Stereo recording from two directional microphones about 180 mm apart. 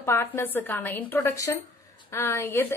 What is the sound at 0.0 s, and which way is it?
A woman's voice, 15° left (ahead or behind).